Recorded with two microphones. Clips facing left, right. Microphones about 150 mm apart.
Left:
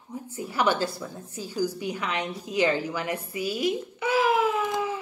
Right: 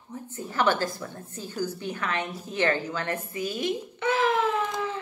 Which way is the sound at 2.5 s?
10° left (ahead or behind).